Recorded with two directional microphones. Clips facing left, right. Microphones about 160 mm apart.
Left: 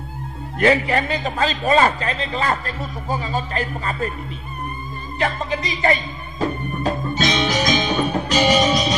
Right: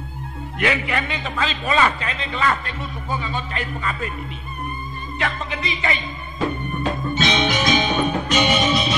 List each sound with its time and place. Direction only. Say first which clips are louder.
0.6 s a man's voice: left 6 dB; 40° left (ahead or behind)
5.2 s a man's voice: left 4 dB; 35° left (ahead or behind)
6.8 s music: left 1 dB; 40° left (ahead or behind)